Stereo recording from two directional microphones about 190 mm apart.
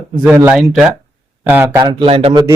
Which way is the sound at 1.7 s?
20° right (ahead or behind).